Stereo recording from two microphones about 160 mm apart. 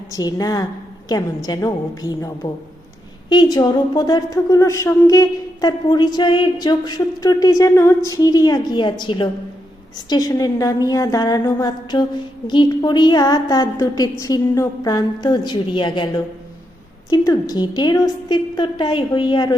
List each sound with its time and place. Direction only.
0.1 s a woman's voice: 25° left (ahead or behind)